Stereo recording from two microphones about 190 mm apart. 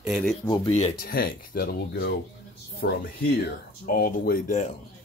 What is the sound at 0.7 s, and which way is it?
Speech, 35° left (ahead or behind).